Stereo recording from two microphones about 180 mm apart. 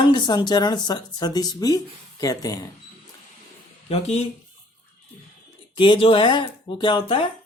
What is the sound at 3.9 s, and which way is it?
Speech, 35° left (ahead or behind).